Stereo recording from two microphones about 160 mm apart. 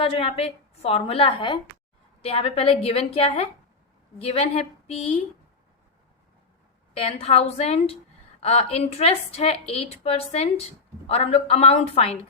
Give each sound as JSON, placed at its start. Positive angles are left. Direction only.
{"t": 0.0, "sound": "a woman's voice", "side_deg": 35}
{"t": 6.9, "sound": "a woman's voice", "side_deg": 35}